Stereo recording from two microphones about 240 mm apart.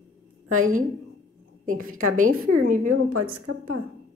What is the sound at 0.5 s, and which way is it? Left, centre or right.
Speech, right.